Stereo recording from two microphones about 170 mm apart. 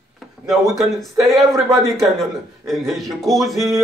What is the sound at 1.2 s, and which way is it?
A man's voice, centre (ahead or behind).